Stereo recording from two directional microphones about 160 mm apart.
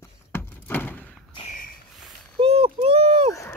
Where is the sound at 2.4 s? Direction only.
35° right (ahead or behind).